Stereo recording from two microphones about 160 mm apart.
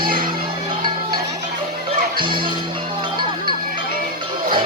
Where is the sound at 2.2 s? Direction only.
30° right (ahead or behind).